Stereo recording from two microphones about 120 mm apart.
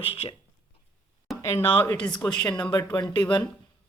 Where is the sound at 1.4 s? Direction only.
20° left (ahead or behind).